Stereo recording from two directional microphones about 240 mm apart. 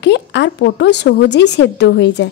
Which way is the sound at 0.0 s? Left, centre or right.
Left.